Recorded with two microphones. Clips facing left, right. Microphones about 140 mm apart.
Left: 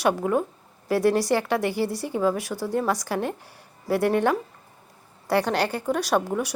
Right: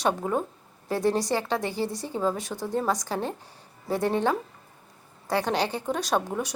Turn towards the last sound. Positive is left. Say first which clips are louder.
# left 3 dB
turn(degrees=5)  # may be behind; listen again after turning